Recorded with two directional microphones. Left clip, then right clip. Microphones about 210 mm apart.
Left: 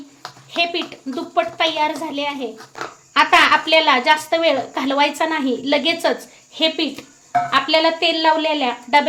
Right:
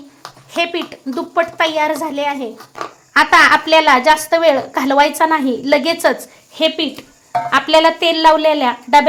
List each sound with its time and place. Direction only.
0.5 s a woman's voice: 20° right (ahead or behind)
7.5 s a woman's voice: 30° right (ahead or behind)